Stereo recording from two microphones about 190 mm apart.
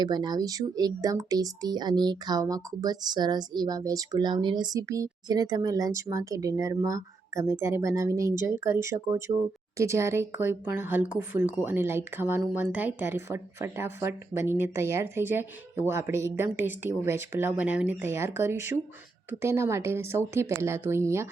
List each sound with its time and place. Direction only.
0.0 s speech: 25° right (ahead or behind)